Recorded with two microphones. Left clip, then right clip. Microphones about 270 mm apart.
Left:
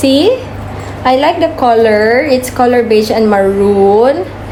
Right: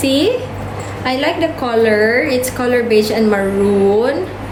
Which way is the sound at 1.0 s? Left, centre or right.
Left.